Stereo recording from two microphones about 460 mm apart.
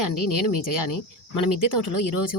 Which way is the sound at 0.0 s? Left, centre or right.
Left.